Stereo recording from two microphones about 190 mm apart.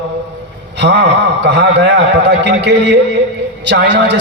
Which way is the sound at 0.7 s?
65° right (ahead or behind).